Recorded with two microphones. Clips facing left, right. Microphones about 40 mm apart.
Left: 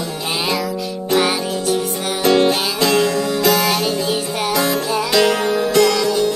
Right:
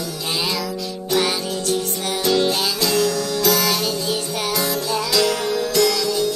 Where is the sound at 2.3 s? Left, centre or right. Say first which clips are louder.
Left 5 dB; left.